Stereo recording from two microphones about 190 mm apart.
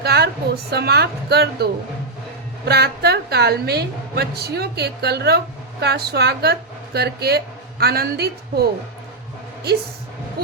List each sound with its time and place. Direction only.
0.0 s a woman's voice: 55° right (ahead or behind)
2.6 s a woman's voice: 55° right (ahead or behind)